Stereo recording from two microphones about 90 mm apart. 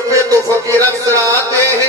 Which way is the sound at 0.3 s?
35° right (ahead or behind).